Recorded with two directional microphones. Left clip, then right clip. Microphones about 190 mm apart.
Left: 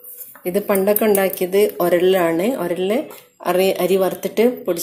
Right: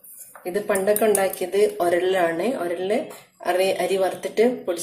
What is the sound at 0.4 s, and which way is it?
Speech, 40° left (ahead or behind).